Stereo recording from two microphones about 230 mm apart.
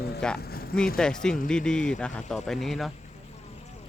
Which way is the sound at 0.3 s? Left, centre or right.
Left.